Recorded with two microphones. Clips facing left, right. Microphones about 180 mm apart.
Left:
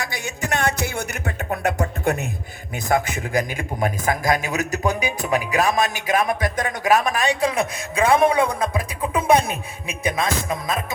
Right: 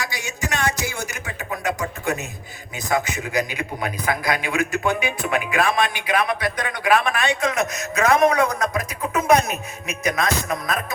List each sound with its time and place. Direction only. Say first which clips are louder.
0.0 s a man's voice: left 1 dB; 55° left (ahead or behind); by 10.8 s 25° left (ahead or behind)